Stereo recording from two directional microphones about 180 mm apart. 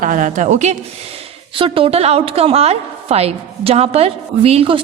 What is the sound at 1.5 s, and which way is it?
A woman's voice, 30° right (ahead or behind).